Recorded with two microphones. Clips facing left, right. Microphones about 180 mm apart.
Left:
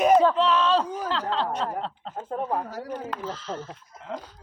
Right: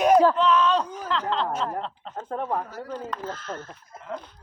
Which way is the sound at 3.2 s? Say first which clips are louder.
Left 1 dB; 50° right (ahead or behind).